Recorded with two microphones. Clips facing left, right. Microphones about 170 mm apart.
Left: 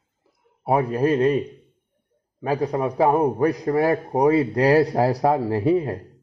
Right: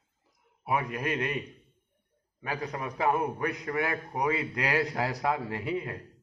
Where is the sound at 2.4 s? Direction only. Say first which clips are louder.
Left 12 dB; 35° left (ahead or behind).